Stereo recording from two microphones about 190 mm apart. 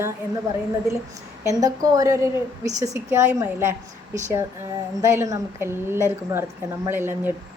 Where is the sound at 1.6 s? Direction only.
20° right (ahead or behind).